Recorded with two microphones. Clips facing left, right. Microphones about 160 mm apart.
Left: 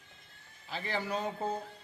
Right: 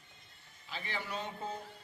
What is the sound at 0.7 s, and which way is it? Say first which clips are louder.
Speech: left 6 dB; 35° left (ahead or behind).